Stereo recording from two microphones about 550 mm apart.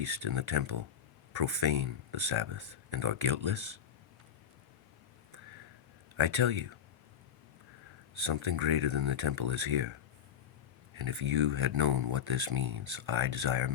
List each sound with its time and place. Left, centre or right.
0.0 s speech: right
6.1 s speech: right
8.1 s speech: right
10.9 s speech: right